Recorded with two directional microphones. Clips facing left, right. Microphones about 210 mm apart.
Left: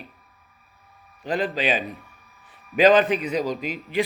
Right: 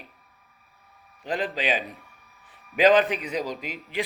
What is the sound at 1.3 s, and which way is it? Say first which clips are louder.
A man's voice: left 3 dB; 15° right (ahead or behind).